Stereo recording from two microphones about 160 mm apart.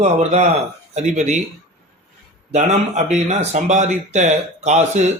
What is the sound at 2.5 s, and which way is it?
Speech, 45° right (ahead or behind).